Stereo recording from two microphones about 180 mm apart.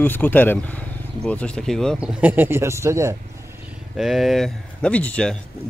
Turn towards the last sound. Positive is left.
turn(degrees=5)  # may be behind; listen again after turning